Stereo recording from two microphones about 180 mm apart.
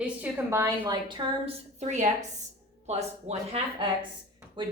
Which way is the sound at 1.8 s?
40° right (ahead or behind).